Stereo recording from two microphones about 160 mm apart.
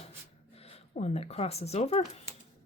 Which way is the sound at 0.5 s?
40° left (ahead or behind).